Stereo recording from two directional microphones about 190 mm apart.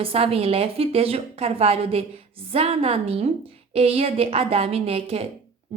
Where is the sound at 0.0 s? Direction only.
30° right (ahead or behind).